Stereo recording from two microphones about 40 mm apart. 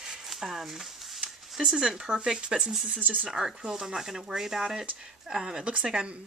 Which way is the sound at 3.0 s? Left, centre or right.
Right.